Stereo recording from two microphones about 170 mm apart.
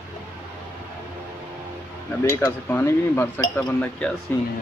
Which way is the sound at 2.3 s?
15° left (ahead or behind).